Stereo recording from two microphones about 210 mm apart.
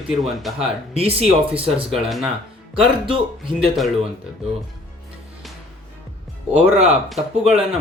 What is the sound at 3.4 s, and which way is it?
Speech, centre (ahead or behind).